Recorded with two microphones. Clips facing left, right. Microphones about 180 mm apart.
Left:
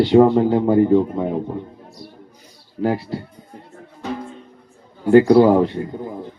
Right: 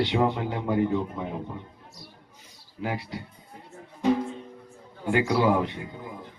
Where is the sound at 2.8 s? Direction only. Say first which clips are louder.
Left 11 dB; 35° left (ahead or behind).